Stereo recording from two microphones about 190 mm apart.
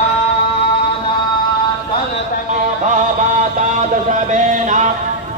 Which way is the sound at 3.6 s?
40° right (ahead or behind).